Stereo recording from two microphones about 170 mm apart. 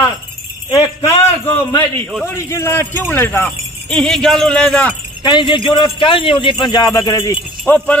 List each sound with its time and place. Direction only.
1.0 s a man's voice: 15° left (ahead or behind)
5.2 s speech: 25° left (ahead or behind); by 8.0 s 10° left (ahead or behind)